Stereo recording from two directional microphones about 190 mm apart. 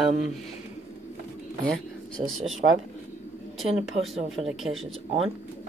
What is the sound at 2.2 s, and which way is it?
Speech, 30° right (ahead or behind).